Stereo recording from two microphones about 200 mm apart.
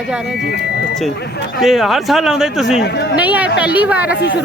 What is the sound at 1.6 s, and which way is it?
Speech, centre (ahead or behind).